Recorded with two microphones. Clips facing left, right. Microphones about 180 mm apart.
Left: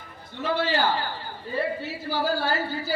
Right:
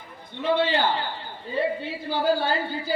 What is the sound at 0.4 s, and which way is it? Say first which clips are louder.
Speech: right 2 dB; 20° right (ahead or behind).